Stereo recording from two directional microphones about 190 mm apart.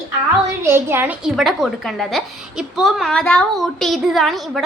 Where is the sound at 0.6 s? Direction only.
15° right (ahead or behind).